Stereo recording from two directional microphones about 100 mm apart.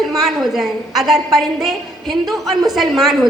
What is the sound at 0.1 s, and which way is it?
A woman's voice, centre (ahead or behind).